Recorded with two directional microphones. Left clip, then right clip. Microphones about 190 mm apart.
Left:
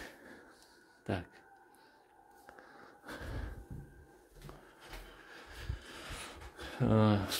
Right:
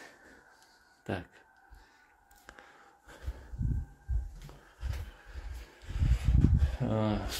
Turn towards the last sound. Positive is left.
turn(degrees=30)  # may be behind; listen again after turning